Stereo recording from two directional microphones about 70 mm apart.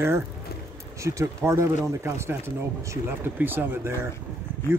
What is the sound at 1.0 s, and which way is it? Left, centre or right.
Speech, right.